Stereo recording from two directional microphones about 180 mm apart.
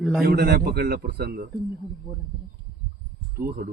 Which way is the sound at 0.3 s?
60° right (ahead or behind).